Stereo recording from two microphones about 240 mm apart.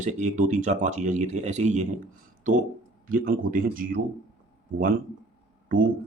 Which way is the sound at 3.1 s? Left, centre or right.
Right.